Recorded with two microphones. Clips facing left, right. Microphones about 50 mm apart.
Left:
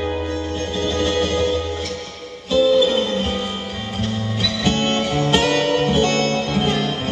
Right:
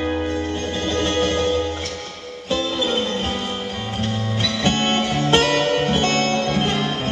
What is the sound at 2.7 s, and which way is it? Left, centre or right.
Music, centre.